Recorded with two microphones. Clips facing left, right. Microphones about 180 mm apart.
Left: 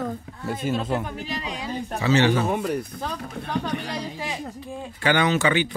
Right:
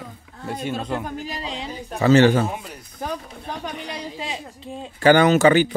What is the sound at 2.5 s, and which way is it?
Speech, 60° left (ahead or behind).